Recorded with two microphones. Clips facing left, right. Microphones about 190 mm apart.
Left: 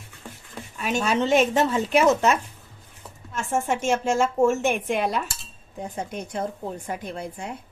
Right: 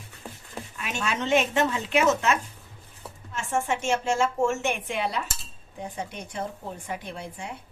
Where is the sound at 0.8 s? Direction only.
40° left (ahead or behind).